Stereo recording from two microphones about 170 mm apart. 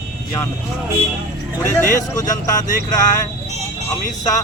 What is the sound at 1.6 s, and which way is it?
Speech, 15° left (ahead or behind).